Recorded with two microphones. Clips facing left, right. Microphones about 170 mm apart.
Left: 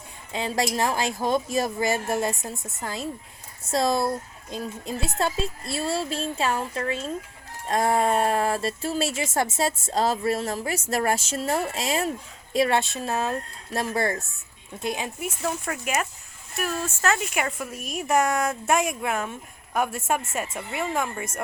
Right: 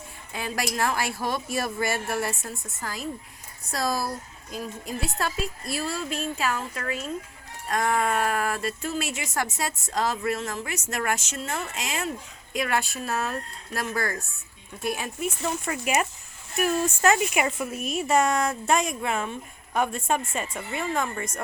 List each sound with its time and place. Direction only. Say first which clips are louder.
0.3 s speech: left 3 dB; 25° left (ahead or behind)
15.4 s a woman's voice: left 4 dB; centre (ahead or behind)
16.6 s a woman's voice: right 4 dB; 15° right (ahead or behind); by 21.2 s 5° left (ahead or behind)